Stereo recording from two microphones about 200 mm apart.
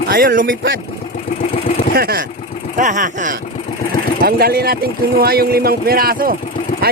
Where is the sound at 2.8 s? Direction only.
40° right (ahead or behind).